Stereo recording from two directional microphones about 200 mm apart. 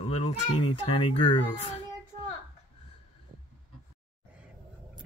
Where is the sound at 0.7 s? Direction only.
25° left (ahead or behind).